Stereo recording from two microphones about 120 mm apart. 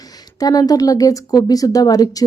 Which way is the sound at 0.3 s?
30° left (ahead or behind).